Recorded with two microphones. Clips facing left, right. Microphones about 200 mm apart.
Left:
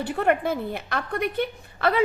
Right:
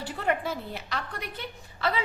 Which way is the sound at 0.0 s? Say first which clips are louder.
Left 6 dB; 55° left (ahead or behind).